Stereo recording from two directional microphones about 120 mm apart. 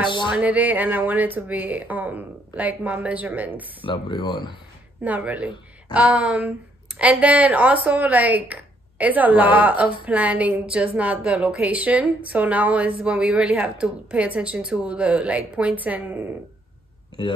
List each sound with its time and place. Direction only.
0.4 s a woman's voice: 10° right (ahead or behind)
3.8 s speech: 45° left (ahead or behind)
5.0 s a woman's voice: 15° right (ahead or behind)